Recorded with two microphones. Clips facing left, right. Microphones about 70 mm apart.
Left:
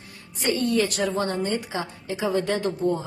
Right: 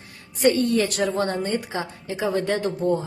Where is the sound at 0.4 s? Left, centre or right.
Right.